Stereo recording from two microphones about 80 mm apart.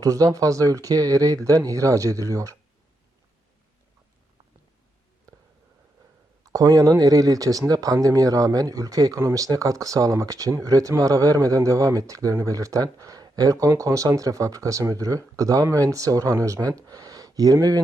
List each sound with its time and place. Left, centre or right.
0.0 s speech: right
6.4 s speech: right